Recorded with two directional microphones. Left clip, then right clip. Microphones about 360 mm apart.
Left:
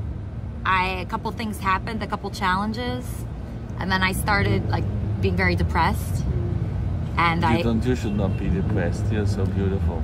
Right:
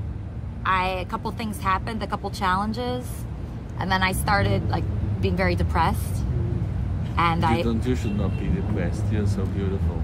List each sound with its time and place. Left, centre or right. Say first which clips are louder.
0.7 s a woman's voice: left 1 dB; centre
7.6 s speech: left 2 dB; left